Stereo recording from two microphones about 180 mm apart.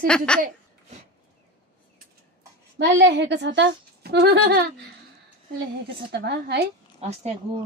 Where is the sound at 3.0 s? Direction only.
75° right (ahead or behind).